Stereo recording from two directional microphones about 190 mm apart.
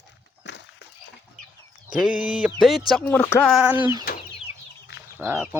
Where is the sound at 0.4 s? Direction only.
70° left (ahead or behind).